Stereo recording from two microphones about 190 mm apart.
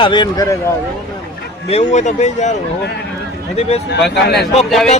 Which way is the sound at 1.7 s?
40° left (ahead or behind).